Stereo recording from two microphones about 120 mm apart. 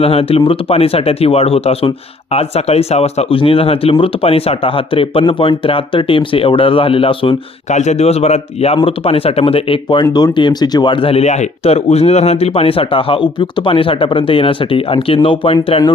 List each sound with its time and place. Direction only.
0.0 s speech: 50° left (ahead or behind)
7.7 s speech: 70° left (ahead or behind); by 15.5 s 50° left (ahead or behind)